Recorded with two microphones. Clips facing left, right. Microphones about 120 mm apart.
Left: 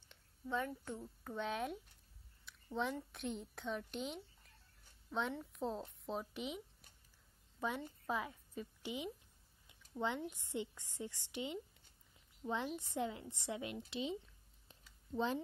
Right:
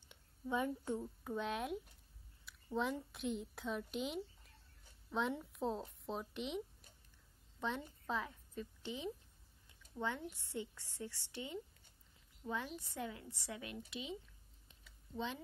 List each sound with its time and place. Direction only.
0.1 s a woman's voice: 15° right (ahead or behind)
1.3 s a woman's voice: centre (ahead or behind)
5.4 s a woman's voice: centre (ahead or behind)
7.6 s a woman's voice: 10° left (ahead or behind); by 14.1 s 30° left (ahead or behind)
15.1 s speech: 35° left (ahead or behind)